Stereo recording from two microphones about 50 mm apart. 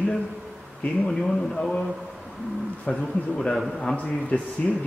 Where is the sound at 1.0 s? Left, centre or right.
Centre.